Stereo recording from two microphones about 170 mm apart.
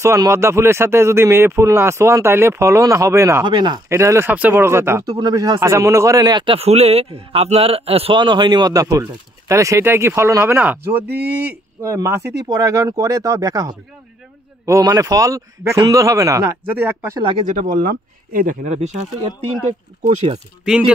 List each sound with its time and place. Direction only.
0.0 s speech: 15° right (ahead or behind)
17.5 s speech: 50° right (ahead or behind)
20.0 s speech: 40° right (ahead or behind)
20.6 s speech: 5° right (ahead or behind)